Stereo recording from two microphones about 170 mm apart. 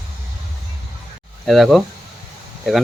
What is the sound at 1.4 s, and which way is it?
Speech, centre (ahead or behind).